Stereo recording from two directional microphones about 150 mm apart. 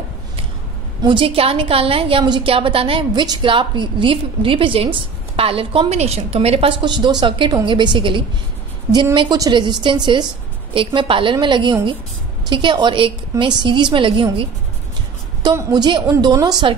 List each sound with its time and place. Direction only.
1.0 s a woman's voice: 35° right (ahead or behind)